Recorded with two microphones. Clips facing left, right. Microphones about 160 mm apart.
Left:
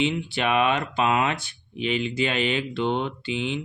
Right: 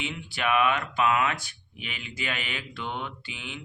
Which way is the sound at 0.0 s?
25° left (ahead or behind).